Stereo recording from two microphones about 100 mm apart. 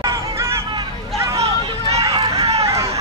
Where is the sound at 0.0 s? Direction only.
30° right (ahead or behind).